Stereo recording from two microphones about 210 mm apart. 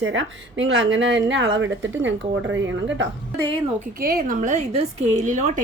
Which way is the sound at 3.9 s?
45° right (ahead or behind).